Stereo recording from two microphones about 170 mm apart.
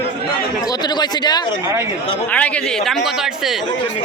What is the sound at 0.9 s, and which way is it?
Speech, 25° left (ahead or behind).